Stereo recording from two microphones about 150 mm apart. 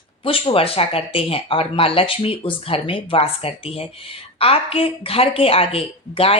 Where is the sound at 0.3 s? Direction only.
40° left (ahead or behind).